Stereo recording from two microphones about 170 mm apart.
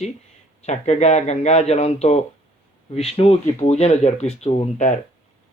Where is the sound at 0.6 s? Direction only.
40° left (ahead or behind).